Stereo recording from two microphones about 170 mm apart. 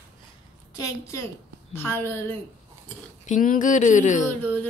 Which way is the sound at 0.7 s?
20° left (ahead or behind).